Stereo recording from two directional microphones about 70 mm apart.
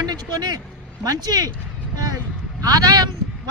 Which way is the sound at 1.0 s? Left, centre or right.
Right.